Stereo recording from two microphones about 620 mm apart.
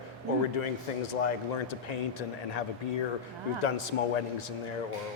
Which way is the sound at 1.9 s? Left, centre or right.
Left.